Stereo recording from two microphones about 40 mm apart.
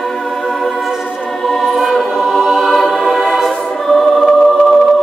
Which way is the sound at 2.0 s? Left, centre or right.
Centre.